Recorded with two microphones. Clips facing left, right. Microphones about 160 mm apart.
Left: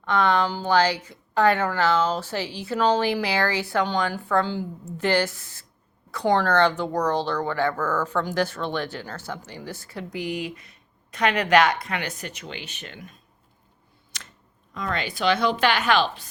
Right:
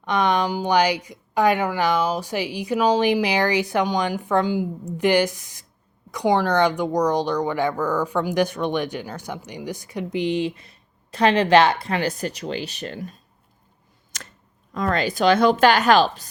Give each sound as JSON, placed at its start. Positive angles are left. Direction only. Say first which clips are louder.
{"t": 0.0, "sound": "speech", "louder": "right 1 dB", "side_deg": -15}
{"t": 14.1, "sound": "a sound", "louder": "right 4 dB", "side_deg": -45}
{"t": 14.7, "sound": "a woman's voice", "louder": "right 6 dB", "side_deg": -45}